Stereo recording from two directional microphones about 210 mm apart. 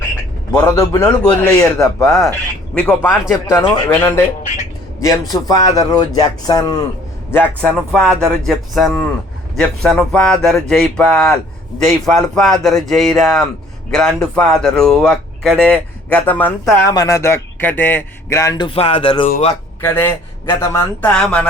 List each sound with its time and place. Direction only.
0.5 s a man's voice: 10° left (ahead or behind)
2.0 s a man's voice: centre (ahead or behind)
5.3 s a man's voice: 15° left (ahead or behind)
19.8 s a man's voice: 10° left (ahead or behind)